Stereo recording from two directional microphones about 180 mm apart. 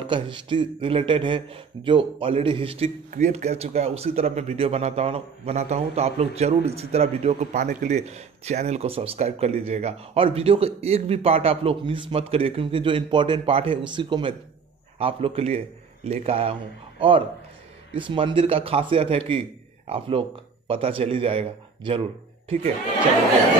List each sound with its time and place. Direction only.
0.0 s speech: 25° right (ahead or behind)
3.1 s a man's voice: 40° right (ahead or behind)